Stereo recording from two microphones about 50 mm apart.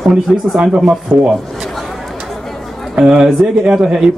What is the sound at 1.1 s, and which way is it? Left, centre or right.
Speech, right.